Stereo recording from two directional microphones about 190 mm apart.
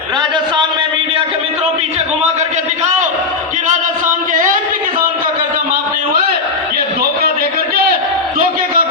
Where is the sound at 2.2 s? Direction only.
35° right (ahead or behind).